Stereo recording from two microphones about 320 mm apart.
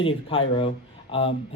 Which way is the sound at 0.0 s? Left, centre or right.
Centre.